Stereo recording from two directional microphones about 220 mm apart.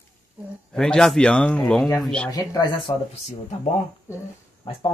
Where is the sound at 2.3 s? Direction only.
15° left (ahead or behind).